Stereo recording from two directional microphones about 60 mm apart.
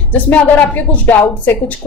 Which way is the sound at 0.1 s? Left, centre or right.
Left.